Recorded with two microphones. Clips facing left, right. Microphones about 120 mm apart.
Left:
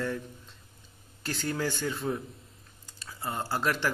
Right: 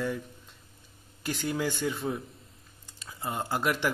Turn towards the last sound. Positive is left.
turn(degrees=-15)  # may be behind; listen again after turning